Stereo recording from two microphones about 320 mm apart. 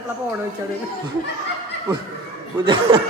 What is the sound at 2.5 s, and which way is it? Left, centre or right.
Speech, centre.